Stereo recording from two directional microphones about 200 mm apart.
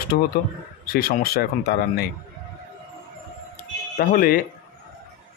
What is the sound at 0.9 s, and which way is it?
Speech, 50° left (ahead or behind).